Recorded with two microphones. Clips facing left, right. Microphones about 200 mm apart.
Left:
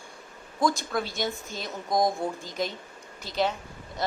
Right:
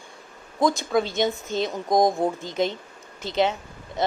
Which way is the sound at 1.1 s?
20° right (ahead or behind).